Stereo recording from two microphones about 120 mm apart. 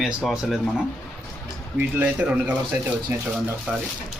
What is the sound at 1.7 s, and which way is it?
Speech, 10° right (ahead or behind).